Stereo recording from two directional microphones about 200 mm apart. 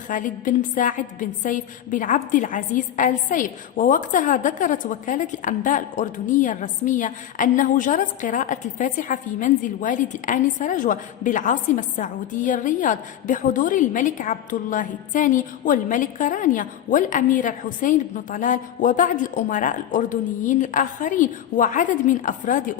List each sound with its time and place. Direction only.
0.1 s a woman's voice: 40° left (ahead or behind)